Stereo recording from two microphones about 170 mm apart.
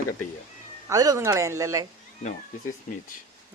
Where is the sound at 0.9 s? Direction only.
20° right (ahead or behind).